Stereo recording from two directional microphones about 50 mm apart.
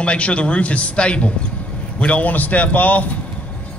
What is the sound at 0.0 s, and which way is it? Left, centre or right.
A man's voice, left.